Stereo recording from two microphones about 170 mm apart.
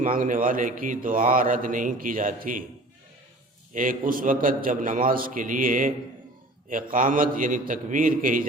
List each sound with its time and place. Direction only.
0.0 s speech: 50° right (ahead or behind)
3.8 s speech: 50° right (ahead or behind)